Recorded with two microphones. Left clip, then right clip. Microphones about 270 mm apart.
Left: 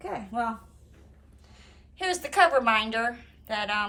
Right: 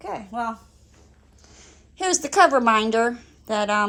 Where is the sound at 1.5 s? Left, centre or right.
Right.